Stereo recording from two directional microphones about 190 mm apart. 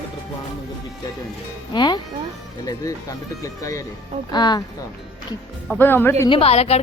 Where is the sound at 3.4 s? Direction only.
15° left (ahead or behind).